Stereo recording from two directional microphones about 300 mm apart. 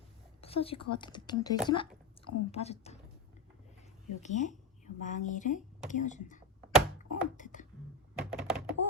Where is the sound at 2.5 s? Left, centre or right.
Left.